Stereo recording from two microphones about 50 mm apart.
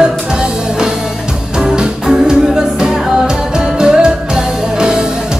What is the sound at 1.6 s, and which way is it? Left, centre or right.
Music, centre.